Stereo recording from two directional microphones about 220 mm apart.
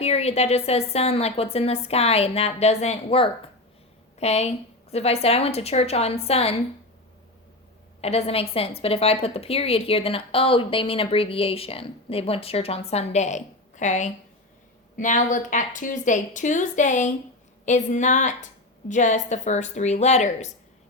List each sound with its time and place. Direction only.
0.0 s a woman's voice: 30° left (ahead or behind)
8.0 s a woman's voice: 25° left (ahead or behind)